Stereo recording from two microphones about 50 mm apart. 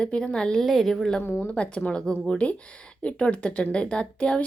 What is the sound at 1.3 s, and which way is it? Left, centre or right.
Speech, left.